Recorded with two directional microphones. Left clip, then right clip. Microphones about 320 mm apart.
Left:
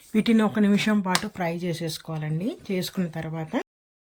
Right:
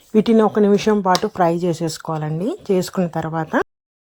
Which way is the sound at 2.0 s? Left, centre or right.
Right.